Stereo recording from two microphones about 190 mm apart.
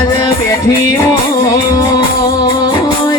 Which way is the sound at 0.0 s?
15° left (ahead or behind).